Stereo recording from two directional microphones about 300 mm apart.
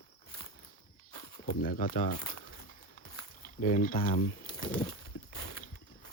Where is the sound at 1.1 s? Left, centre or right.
Centre.